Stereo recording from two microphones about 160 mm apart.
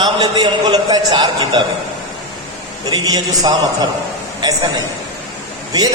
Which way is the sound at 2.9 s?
25° right (ahead or behind).